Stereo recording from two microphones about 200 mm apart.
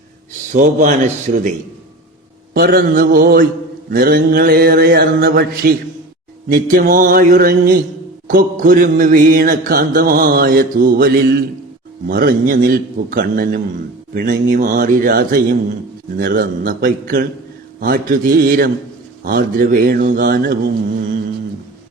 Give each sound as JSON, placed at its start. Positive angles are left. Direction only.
{"t": 0.5, "sound": "a man's voice", "side_deg": -40}
{"t": 2.5, "sound": "mantra", "side_deg": -50}